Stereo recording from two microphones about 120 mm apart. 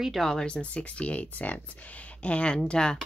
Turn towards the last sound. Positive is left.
turn(degrees=5)  # may be behind; listen again after turning